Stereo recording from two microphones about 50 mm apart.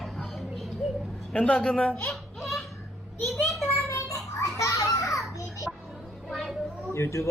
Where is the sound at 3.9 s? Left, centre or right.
Left.